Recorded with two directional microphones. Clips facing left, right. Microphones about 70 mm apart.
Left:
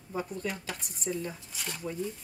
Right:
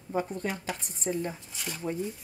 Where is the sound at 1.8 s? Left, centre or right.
Right.